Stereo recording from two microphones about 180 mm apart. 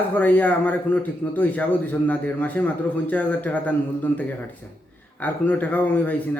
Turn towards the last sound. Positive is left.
turn(degrees=10)  # may be behind; listen again after turning